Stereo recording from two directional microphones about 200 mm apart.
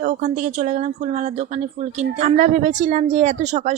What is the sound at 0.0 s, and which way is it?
A woman's voice, 40° right (ahead or behind).